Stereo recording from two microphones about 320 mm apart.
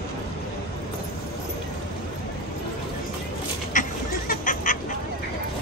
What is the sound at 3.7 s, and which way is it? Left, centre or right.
Fowl, left.